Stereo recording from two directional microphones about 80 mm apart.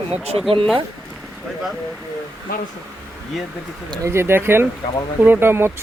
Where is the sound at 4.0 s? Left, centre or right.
Right.